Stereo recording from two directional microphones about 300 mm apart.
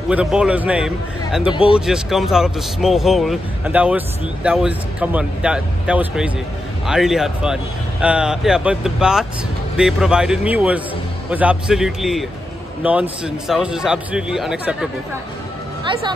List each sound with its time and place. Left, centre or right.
0.1 s speech: centre
1.5 s speech: centre
1.9 s speech: centre